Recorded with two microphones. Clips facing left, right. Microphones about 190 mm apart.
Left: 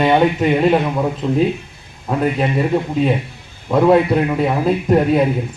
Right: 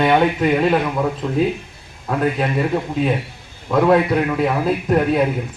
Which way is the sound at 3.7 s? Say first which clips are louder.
Left 2 dB; 20° left (ahead or behind).